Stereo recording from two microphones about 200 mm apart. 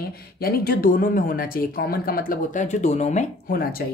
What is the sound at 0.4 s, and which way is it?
Speech, 50° left (ahead or behind).